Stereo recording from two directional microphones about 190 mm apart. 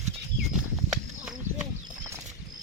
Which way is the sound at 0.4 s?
5° right (ahead or behind).